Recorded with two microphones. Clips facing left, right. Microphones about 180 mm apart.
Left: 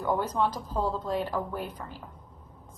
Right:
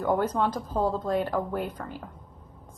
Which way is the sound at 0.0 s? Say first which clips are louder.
Right 2 dB; 55° right (ahead or behind).